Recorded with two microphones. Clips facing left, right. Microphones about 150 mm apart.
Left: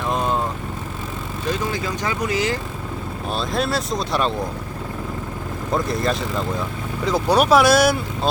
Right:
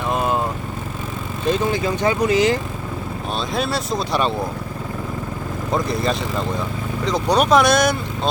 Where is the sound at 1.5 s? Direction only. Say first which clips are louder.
Right 5 dB; 25° right (ahead or behind).